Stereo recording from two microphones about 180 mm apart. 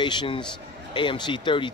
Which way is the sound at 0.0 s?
25° left (ahead or behind).